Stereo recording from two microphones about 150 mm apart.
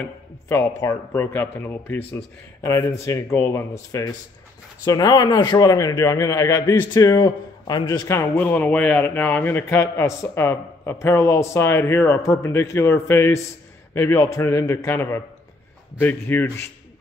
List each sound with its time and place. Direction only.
0.0 s speech: 20° left (ahead or behind)